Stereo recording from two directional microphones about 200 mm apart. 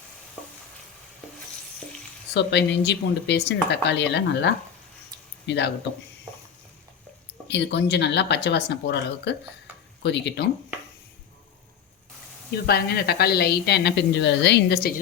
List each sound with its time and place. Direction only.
2.3 s speech: 60° left (ahead or behind)
7.4 s speech: 60° left (ahead or behind)
12.6 s a woman's voice: 50° left (ahead or behind)